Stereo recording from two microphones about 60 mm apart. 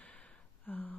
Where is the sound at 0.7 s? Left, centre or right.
Left.